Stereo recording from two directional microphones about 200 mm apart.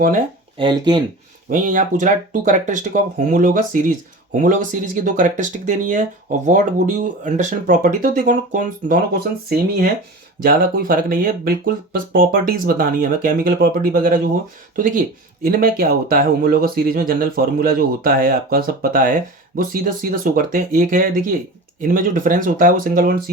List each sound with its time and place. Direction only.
0.6 s speech: 20° right (ahead or behind)
1.5 s speech: 40° right (ahead or behind)